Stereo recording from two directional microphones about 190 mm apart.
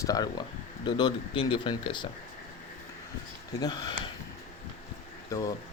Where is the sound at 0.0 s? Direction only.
20° left (ahead or behind).